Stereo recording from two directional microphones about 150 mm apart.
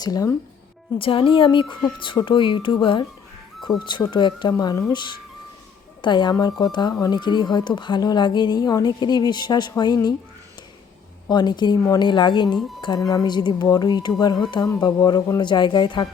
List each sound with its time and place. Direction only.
0.0 s speech: 25° left (ahead or behind)
0.9 s speech: 35° left (ahead or behind)
4.1 s speech: 30° left (ahead or behind)
11.3 s speech: 30° left (ahead or behind)